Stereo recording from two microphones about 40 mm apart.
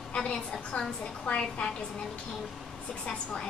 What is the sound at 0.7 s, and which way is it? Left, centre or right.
Speech, left.